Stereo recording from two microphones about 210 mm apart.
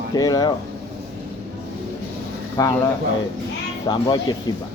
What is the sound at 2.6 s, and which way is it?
Speech, 15° left (ahead or behind).